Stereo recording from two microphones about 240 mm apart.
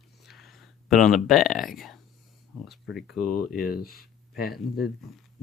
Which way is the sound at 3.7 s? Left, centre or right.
Left.